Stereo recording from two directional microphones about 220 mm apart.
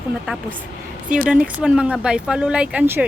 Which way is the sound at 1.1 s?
5° right (ahead or behind).